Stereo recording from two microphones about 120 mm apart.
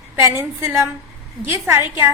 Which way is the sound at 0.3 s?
20° right (ahead or behind).